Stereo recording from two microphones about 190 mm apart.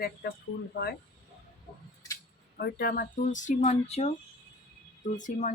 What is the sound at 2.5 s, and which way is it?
Speech, 55° left (ahead or behind).